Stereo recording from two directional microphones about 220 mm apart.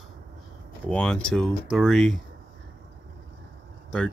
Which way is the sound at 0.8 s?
5° left (ahead or behind).